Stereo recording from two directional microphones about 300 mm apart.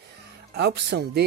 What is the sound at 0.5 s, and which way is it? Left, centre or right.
Speech, right.